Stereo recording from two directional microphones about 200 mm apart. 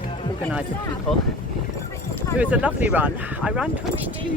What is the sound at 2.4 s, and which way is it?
Speech, 5° right (ahead or behind).